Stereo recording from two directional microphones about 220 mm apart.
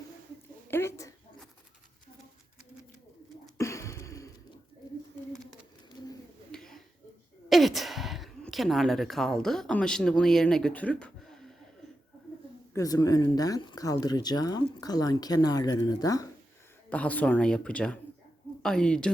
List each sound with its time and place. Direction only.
0.7 s speech: 10° left (ahead or behind)
3.6 s a sound: 15° left (ahead or behind)
6.5 s finger snapping: centre (ahead or behind)
7.5 s speech: centre (ahead or behind)
12.7 s speech: 15° left (ahead or behind)